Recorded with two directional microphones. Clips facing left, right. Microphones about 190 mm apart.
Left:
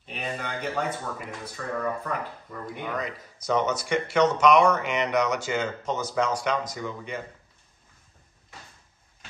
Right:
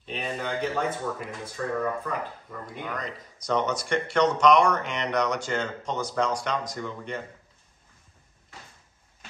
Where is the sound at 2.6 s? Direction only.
5° left (ahead or behind).